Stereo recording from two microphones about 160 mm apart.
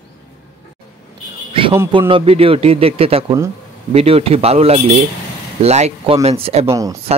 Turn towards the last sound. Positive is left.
turn(degrees=-20)  # may be behind; listen again after turning